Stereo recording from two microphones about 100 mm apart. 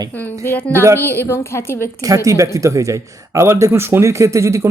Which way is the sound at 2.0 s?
35° right (ahead or behind).